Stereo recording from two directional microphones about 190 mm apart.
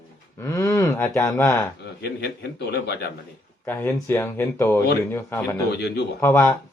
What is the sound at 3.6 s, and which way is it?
Speech, 10° left (ahead or behind).